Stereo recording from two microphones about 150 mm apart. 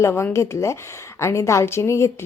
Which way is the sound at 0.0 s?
15° left (ahead or behind).